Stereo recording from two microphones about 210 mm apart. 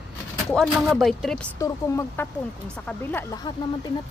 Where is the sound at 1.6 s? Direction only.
15° left (ahead or behind).